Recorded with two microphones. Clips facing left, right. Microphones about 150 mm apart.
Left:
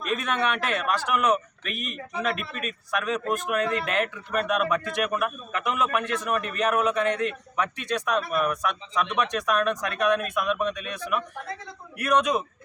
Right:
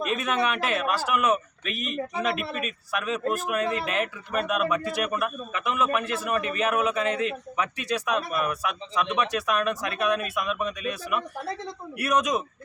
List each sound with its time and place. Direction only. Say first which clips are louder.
0.2 s a man's voice: right 1 dB; 10° right (ahead or behind)
1.7 s speech: right 3 dB; 45° left (ahead or behind)
2.1 s a man's voice: left 1 dB; 5° right (ahead or behind)